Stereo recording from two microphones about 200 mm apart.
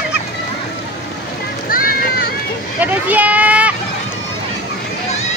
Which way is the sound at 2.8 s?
10° right (ahead or behind).